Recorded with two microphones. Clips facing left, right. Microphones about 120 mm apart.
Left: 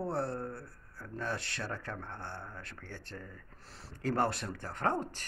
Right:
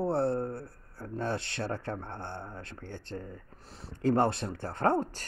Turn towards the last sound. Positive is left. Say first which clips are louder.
# right 6 dB
turn(degrees=-30)  # may be behind; listen again after turning